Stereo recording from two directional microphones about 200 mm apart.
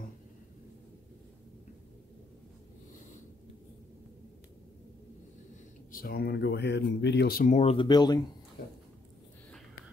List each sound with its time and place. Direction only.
5.9 s speech: 50° left (ahead or behind); by 8.2 s 20° left (ahead or behind)